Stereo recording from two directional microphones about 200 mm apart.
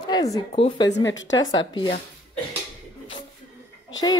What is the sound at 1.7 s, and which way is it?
Speech, 20° left (ahead or behind).